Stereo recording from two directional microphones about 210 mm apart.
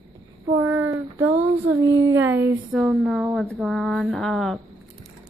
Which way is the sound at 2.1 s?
10° right (ahead or behind).